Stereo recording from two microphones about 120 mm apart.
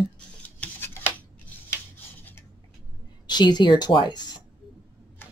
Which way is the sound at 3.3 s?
35° left (ahead or behind).